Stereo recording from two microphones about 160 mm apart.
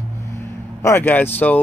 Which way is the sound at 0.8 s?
15° left (ahead or behind).